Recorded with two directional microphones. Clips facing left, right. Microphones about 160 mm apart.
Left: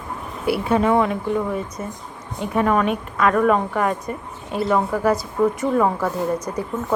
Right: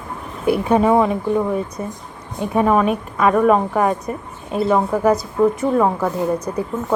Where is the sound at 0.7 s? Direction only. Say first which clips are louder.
Right 3 dB; 20° right (ahead or behind).